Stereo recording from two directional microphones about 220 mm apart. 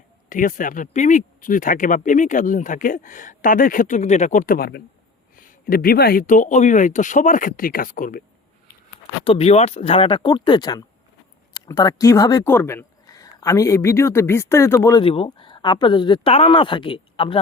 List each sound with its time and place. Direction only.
0.3 s speech: 35° left (ahead or behind)
9.2 s speech: 25° left (ahead or behind)
15.0 s speech: 25° left (ahead or behind)